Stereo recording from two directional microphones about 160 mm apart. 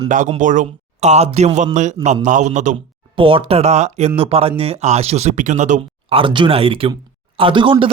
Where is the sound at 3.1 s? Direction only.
35° right (ahead or behind).